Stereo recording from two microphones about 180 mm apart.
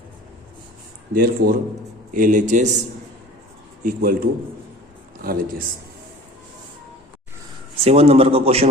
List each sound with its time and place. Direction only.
1.1 s a man's voice: 50° right (ahead or behind)
3.8 s a man's voice: 55° right (ahead or behind)
7.9 s a man's voice: 35° right (ahead or behind)